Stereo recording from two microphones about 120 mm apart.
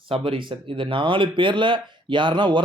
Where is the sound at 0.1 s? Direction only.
45° right (ahead or behind).